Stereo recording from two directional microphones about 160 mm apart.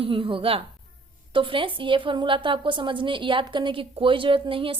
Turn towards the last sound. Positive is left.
turn(degrees=-35)  # may be behind; listen again after turning